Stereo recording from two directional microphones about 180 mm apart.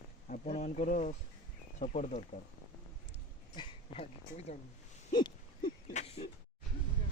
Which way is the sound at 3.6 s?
35° left (ahead or behind).